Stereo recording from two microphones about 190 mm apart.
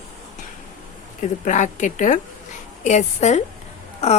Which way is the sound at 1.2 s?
40° left (ahead or behind).